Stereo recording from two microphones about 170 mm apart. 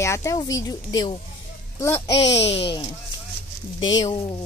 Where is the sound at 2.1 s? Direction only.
35° left (ahead or behind).